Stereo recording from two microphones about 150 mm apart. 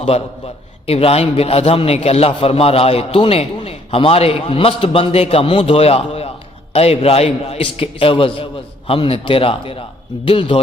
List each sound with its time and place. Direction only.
0.0 s a man's voice: 40° left (ahead or behind)